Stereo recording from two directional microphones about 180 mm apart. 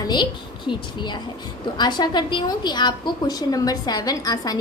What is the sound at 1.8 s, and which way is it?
A woman's voice, 25° left (ahead or behind).